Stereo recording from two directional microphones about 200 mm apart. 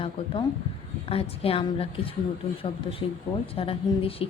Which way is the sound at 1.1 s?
30° left (ahead or behind).